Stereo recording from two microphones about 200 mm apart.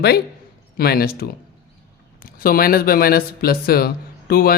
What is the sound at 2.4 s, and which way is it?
Speech, 45° left (ahead or behind).